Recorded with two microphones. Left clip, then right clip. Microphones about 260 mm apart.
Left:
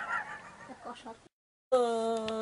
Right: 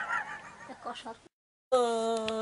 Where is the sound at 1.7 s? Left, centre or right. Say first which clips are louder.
Right 1 dB; centre.